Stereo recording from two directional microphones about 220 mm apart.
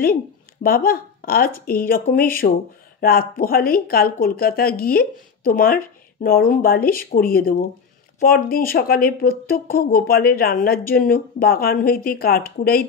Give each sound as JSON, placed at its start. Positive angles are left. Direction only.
{"t": 0.0, "sound": "speech", "side_deg": 40}